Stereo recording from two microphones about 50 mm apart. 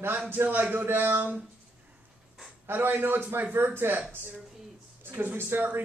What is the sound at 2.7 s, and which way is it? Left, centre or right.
A man's voice, right.